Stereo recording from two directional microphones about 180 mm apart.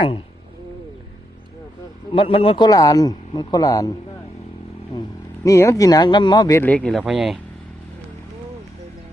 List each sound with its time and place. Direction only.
2.1 s a man's voice: 30° left (ahead or behind)
2.6 s speech: 20° left (ahead or behind)
4.9 s speech: 20° left (ahead or behind)
6.6 s speech: 5° left (ahead or behind)